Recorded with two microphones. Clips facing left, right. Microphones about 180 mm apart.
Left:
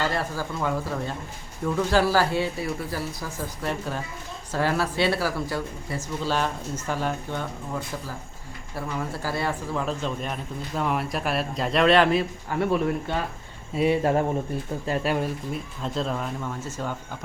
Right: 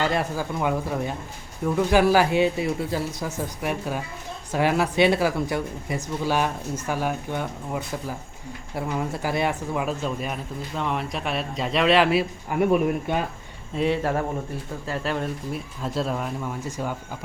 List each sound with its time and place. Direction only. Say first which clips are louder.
0.0 s a man's voice: right 3 dB; 20° right (ahead or behind); by 12.2 s centre (ahead or behind)
12.5 s speech: right 4 dB; 15° right (ahead or behind)
13.7 s speech: left 1 dB; 10° left (ahead or behind)
14.0 s speech: left 3 dB; 20° left (ahead or behind)
14.8 s speech: left 2 dB; 10° left (ahead or behind)
15.5 s speech: right 1 dB; 5° right (ahead or behind)